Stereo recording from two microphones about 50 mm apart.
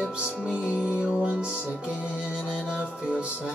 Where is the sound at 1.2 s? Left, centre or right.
Right.